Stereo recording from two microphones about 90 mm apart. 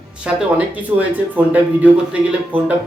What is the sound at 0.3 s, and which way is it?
A man's voice, 15° right (ahead or behind).